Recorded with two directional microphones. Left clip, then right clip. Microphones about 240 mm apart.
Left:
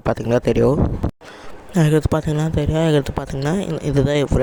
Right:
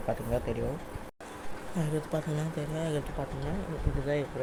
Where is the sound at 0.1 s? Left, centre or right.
Left.